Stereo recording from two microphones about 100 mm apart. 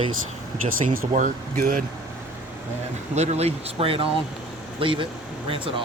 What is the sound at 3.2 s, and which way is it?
Speech, 90° right.